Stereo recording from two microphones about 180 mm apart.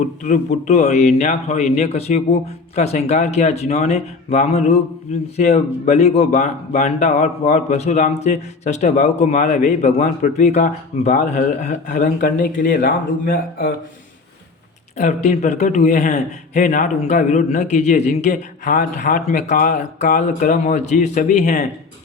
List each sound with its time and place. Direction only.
0.0 s speech: 40° left (ahead or behind)
14.9 s a man's voice: 45° left (ahead or behind)